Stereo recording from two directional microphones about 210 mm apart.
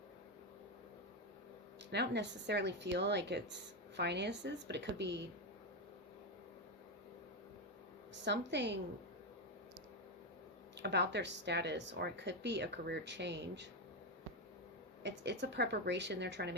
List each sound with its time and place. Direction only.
1.9 s speech: 55° right (ahead or behind)
8.2 s speech: 55° right (ahead or behind)
10.8 s speech: 55° right (ahead or behind)
15.0 s speech: 55° right (ahead or behind)